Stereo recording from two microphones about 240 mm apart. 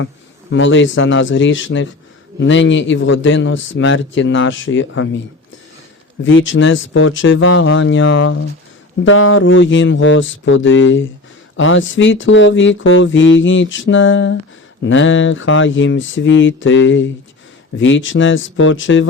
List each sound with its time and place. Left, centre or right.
0.5 s speech: left
6.2 s speech: left